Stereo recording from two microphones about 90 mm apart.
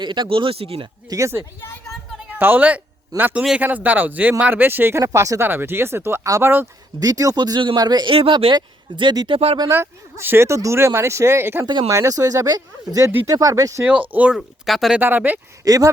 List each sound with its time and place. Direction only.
0.0 s speech: 60° right (ahead or behind); by 0.9 s 90° right
1.1 s speech: 30° right (ahead or behind)
2.4 s speech: 20° right (ahead or behind)
7.0 s speech: 40° right (ahead or behind)
7.3 s speech: 55° right (ahead or behind)
8.1 s speech: 90° right
8.5 s speech: 55° right (ahead or behind)
9.6 s speech: 30° right (ahead or behind)
11.6 s speech: 55° right (ahead or behind)
11.9 s speech: 35° right (ahead or behind)
14.1 s speech: 15° right (ahead or behind)
14.7 s speech: centre (ahead or behind)
14.9 s speech: 20° right (ahead or behind)
15.6 s speech: 40° right (ahead or behind)